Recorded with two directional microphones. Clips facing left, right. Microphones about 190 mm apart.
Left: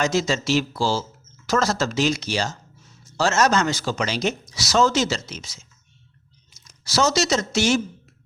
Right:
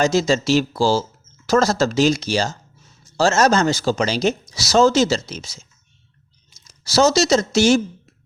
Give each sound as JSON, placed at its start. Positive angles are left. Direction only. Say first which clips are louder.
{"t": 0.0, "sound": "speech", "louder": "right 5 dB", "side_deg": -35}
{"t": 6.7, "sound": "speech", "louder": "right 5 dB", "side_deg": -30}